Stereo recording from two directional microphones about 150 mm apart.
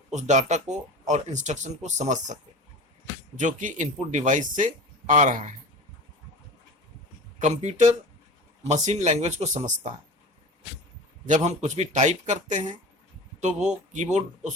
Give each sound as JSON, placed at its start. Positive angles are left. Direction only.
{"t": 0.1, "sound": "speech", "side_deg": -50}
{"t": 7.3, "sound": "speech", "side_deg": -50}
{"t": 11.3, "sound": "speech", "side_deg": -50}